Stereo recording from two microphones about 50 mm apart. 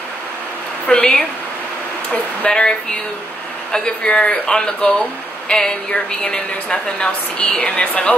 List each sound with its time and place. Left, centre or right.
0.8 s a woman's voice: left
2.4 s speech: centre
3.7 s a woman's voice: centre